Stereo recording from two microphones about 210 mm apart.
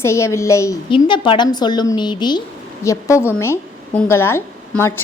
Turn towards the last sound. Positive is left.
turn(degrees=10)  # may be behind; listen again after turning